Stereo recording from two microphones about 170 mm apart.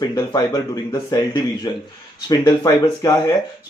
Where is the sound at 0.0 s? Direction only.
25° left (ahead or behind).